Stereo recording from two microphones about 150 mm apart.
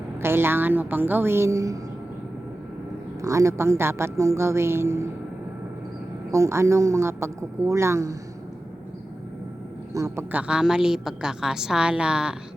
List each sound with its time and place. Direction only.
0.2 s a woman's voice: 15° right (ahead or behind)
3.2 s a woman's voice: 20° right (ahead or behind)
6.3 s a woman's voice: 20° right (ahead or behind)
9.9 s a woman's voice: 20° right (ahead or behind)
10.3 s a woman's voice: 5° right (ahead or behind)